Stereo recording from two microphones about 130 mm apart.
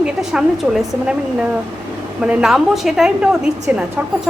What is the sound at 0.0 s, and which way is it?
A woman's voice, 5° right (ahead or behind).